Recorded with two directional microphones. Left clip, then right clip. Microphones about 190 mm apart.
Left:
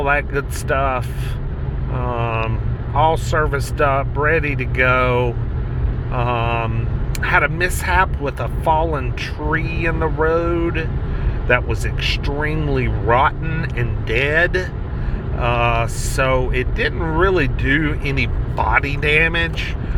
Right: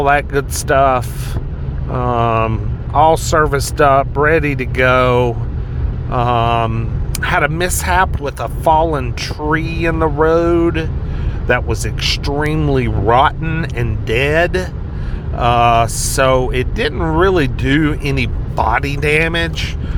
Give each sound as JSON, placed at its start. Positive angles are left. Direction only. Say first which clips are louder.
{"t": 0.0, "sound": "speech", "louder": "right 5 dB", "side_deg": -40}